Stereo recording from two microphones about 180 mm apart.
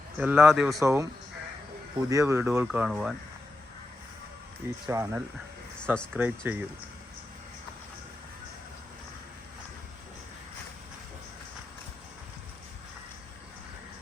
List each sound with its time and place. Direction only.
0.2 s speech: 5° right (ahead or behind)
0.8 s speech: 15° right (ahead or behind)
2.0 s speech: 15° right (ahead or behind)
4.9 s speech: 15° right (ahead or behind)
5.8 s speech: 5° left (ahead or behind)
6.1 s speech: 10° right (ahead or behind)